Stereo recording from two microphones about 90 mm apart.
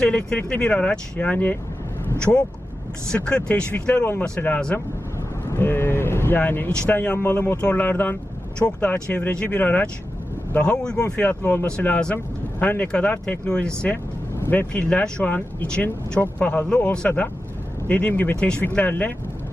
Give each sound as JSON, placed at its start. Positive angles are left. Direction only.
{"t": 0.0, "sound": "speech", "side_deg": 10}
{"t": 5.5, "sound": "vehicle", "side_deg": 25}
{"t": 6.7, "sound": "speech", "side_deg": 15}
{"t": 13.9, "sound": "vehicle", "side_deg": 25}
{"t": 14.7, "sound": "speech", "side_deg": 10}